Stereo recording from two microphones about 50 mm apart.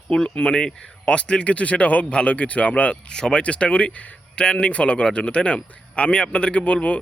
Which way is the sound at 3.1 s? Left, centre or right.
Centre.